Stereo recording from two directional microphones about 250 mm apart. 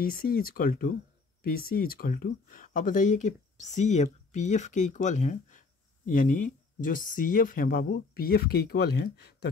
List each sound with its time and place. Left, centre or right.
0.0 s speech: left